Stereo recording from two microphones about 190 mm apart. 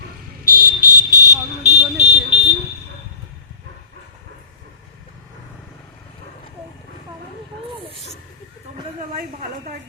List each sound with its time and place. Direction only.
0.4 s vehicle: 45° right (ahead or behind)
1.6 s car alarm: 35° right (ahead or behind)